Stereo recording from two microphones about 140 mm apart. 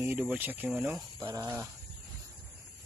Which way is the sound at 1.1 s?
25° right (ahead or behind).